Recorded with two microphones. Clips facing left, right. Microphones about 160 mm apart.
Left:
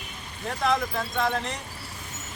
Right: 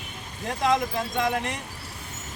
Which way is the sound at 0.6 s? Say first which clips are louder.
Right 2 dB; 15° right (ahead or behind).